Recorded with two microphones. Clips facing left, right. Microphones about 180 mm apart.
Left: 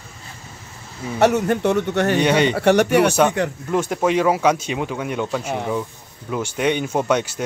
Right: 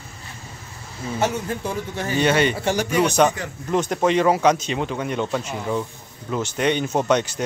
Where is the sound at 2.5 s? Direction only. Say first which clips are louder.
Left 7 dB; 65° left (ahead or behind).